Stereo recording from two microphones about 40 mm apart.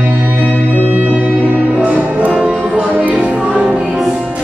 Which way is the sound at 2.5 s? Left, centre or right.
Centre.